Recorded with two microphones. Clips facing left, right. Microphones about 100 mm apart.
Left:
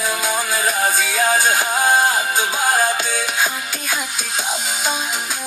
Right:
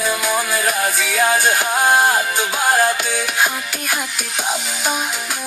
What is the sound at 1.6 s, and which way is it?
Music, 15° right (ahead or behind).